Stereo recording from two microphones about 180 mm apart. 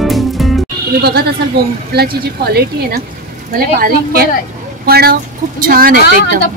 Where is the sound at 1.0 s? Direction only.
65° right (ahead or behind).